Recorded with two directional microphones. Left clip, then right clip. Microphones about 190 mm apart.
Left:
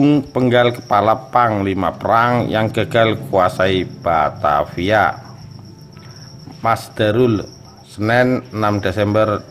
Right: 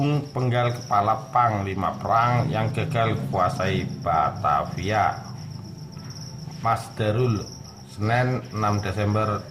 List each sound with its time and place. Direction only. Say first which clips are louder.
0.0 s speech: left 12 dB; 40° left (ahead or behind)
6.6 s speech: left 8 dB; 45° left (ahead or behind)